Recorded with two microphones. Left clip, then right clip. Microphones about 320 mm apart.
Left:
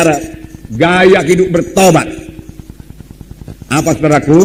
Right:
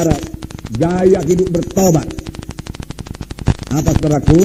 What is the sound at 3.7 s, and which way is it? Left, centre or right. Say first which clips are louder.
Speech: left 7 dB; left.